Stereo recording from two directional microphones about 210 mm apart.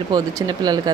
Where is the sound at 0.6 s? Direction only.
20° right (ahead or behind).